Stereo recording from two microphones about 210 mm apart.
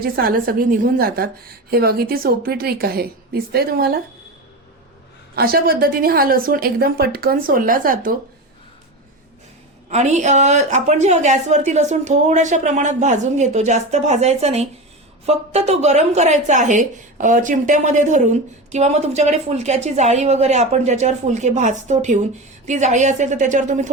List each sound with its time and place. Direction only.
0.0 s a woman's voice: 45° right (ahead or behind)
5.3 s a woman's voice: 45° right (ahead or behind)
9.9 s a woman's voice: 35° right (ahead or behind)